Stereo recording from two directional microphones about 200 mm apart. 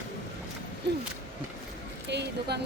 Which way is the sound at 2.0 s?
60° right (ahead or behind).